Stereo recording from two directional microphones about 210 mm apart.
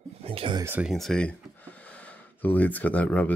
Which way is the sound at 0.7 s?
5° right (ahead or behind).